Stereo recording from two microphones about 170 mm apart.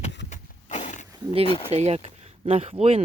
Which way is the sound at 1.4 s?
30° left (ahead or behind).